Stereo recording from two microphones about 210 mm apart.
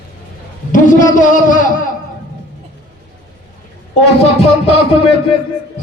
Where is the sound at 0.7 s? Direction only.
40° left (ahead or behind).